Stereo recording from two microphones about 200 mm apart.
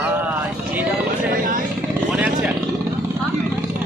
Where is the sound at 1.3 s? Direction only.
45° right (ahead or behind).